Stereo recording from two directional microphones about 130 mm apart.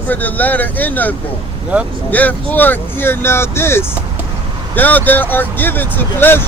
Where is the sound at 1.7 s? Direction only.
10° right (ahead or behind).